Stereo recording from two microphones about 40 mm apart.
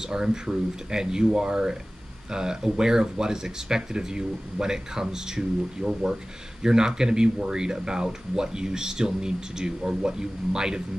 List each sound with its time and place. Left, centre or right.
0.0 s speech: centre